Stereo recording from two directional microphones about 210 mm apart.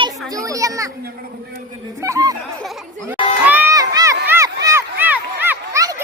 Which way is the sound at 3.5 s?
10° right (ahead or behind).